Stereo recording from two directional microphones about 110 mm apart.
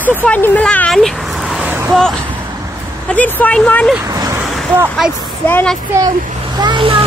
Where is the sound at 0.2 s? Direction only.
15° left (ahead or behind); by 1.6 s centre (ahead or behind).